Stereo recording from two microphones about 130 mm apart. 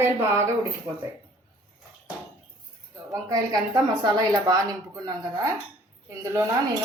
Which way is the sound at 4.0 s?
30° right (ahead or behind).